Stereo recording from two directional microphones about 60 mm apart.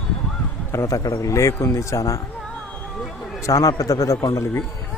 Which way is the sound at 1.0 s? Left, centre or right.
Left.